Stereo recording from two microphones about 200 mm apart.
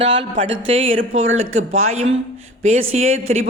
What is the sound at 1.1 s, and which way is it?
Speech, 80° right.